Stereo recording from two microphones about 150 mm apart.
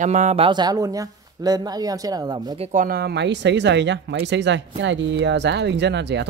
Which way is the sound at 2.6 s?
55° right (ahead or behind).